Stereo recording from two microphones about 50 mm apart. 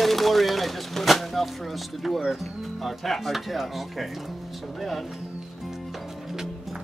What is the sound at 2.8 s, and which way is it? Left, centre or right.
Speech, centre.